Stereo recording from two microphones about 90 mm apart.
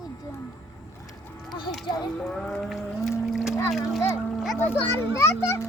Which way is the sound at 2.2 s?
5° left (ahead or behind).